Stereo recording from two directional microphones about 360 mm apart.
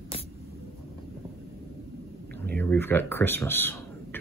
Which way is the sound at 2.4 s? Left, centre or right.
Centre.